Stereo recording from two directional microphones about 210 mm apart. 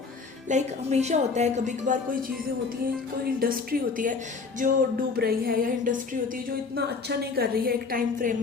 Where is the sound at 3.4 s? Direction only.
45° right (ahead or behind).